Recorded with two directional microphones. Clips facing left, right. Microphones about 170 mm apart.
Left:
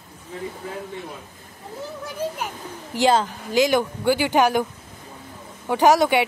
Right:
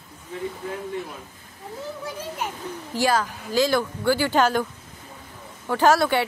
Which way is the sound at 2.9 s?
25° left (ahead or behind).